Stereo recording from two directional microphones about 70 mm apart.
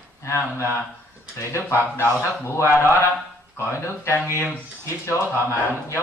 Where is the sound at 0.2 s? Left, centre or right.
Left.